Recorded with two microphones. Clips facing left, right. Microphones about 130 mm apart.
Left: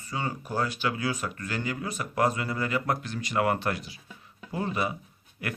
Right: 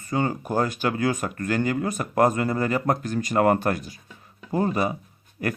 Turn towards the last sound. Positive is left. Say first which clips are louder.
# right 7 dB
turn(degrees=-40)  # may be behind; listen again after turning